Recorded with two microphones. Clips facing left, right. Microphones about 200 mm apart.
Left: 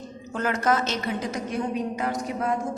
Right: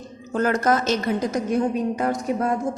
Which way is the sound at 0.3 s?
40° right (ahead or behind).